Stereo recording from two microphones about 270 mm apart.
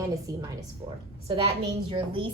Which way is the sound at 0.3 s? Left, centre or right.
Centre.